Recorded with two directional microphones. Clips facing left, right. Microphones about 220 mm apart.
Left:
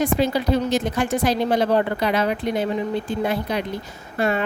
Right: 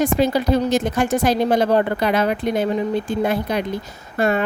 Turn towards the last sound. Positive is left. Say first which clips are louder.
# right 3 dB
turn(degrees=-45)  # may be behind; listen again after turning